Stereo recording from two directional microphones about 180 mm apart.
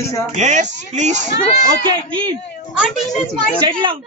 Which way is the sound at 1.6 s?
30° right (ahead or behind).